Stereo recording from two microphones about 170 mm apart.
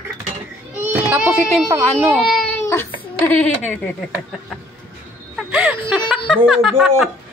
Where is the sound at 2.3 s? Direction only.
5° left (ahead or behind).